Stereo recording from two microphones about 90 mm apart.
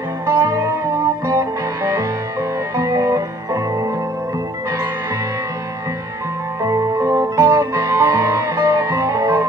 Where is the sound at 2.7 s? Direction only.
35° right (ahead or behind).